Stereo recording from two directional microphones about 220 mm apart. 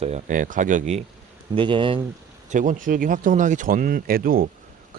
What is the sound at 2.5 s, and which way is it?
Speech, 35° right (ahead or behind).